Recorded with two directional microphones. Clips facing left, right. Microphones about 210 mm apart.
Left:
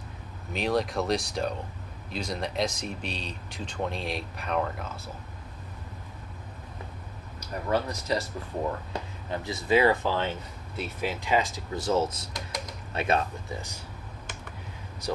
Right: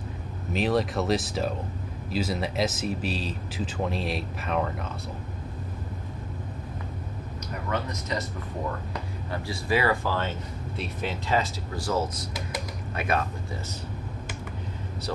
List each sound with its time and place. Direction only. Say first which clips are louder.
0.5 s speech: right 2 dB; centre (ahead or behind)
7.7 s speech: left 3 dB; 35° left (ahead or behind)
9.3 s speech: left 3 dB; 20° left (ahead or behind)